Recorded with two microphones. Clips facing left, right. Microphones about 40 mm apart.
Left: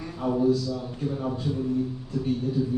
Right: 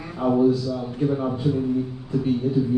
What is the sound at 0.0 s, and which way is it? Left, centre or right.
A man's voice, right.